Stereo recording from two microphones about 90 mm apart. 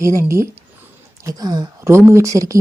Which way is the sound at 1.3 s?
45° right (ahead or behind).